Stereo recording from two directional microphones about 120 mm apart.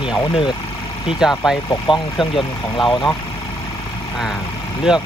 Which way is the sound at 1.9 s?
40° left (ahead or behind).